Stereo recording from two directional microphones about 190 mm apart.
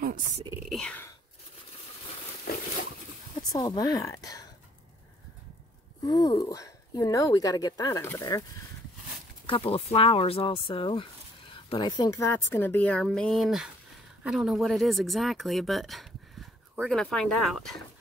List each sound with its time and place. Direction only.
0.7 s whispering: 5° left (ahead or behind)
3.5 s speech: 20° left (ahead or behind)
6.0 s speech: 20° left (ahead or behind)
9.5 s a woman's voice: 30° left (ahead or behind); by 17.7 s centre (ahead or behind)